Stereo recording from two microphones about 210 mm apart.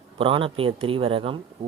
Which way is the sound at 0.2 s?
25° right (ahead or behind).